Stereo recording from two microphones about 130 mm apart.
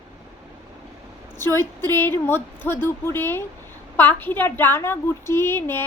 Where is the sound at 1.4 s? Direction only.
20° left (ahead or behind).